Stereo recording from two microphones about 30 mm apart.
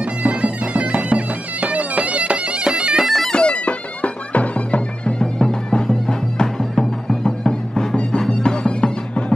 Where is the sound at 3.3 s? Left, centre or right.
Left.